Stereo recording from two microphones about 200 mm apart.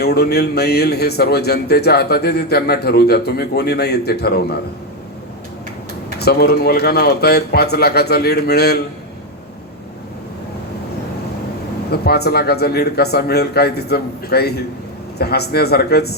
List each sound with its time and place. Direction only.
0.0 s speech: 55° left (ahead or behind)
6.1 s speech: 55° left (ahead or behind)
11.9 s speech: 55° left (ahead or behind)